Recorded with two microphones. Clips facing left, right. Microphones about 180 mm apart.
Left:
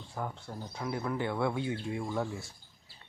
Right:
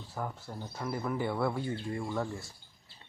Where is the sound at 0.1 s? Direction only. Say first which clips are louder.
Even; centre (ahead or behind).